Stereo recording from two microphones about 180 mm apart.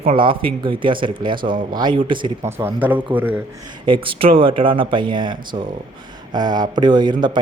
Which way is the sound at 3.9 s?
30° right (ahead or behind).